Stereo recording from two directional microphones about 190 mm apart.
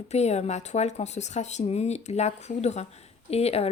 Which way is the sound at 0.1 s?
35° left (ahead or behind).